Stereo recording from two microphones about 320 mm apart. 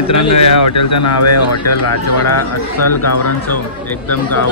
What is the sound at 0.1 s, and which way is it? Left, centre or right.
Speech, left.